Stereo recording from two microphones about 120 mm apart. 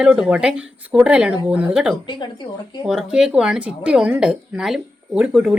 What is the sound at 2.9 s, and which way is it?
Speech, 5° right (ahead or behind).